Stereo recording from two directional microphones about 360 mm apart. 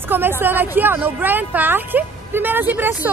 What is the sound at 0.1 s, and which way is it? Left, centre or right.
Speech, centre.